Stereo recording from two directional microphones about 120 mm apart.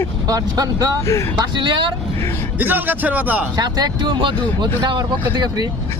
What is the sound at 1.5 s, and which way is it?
Speech, 40° right (ahead or behind).